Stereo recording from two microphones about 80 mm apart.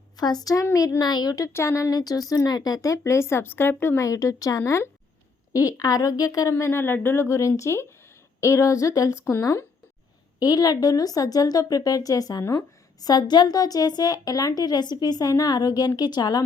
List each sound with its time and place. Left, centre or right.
0.2 s a woman's voice: left
0.5 s speech: left
0.9 s a woman's voice: left
1.5 s speech: left
3.9 s speech: left
6.5 s speech: left
10.4 s a woman's voice: left